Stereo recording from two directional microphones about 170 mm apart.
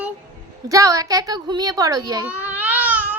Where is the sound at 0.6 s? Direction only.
20° right (ahead or behind).